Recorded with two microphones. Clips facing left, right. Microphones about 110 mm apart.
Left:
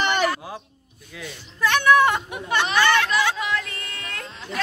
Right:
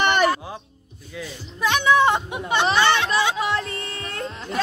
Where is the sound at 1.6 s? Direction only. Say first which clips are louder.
Left 1 dB; 20° right (ahead or behind).